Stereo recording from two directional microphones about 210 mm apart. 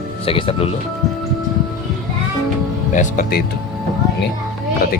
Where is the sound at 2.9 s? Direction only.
40° left (ahead or behind).